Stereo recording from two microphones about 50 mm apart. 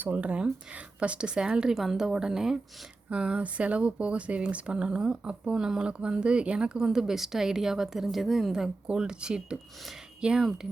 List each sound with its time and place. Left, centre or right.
0.0 s a woman's voice: right; by 2.6 s centre
3.1 s speech: right